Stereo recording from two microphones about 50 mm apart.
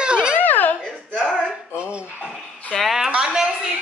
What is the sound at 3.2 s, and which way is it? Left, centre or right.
Speech, centre.